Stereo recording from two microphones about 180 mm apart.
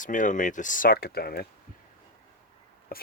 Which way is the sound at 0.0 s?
45° left (ahead or behind).